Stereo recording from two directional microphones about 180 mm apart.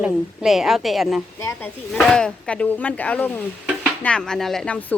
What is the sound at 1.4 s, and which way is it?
Speech, 15° left (ahead or behind).